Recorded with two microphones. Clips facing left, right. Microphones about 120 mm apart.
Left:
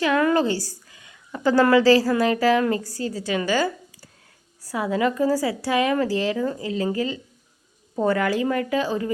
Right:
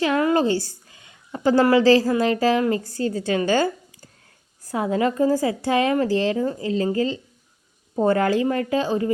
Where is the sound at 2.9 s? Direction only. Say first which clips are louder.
Right 4 dB; 45° right (ahead or behind).